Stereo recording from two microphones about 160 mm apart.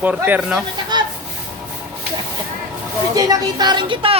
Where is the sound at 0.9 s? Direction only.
25° right (ahead or behind).